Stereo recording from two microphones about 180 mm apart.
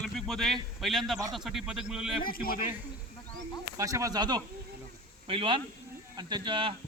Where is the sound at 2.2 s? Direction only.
55° left (ahead or behind).